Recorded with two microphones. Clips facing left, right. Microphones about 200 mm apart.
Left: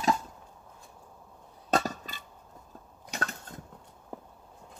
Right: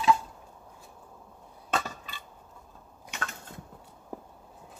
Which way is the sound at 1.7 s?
45° left (ahead or behind).